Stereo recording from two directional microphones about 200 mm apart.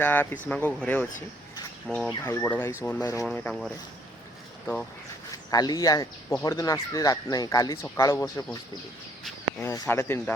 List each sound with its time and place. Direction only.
0.0 s speech: 10° left (ahead or behind)
9.6 s speech: 15° left (ahead or behind)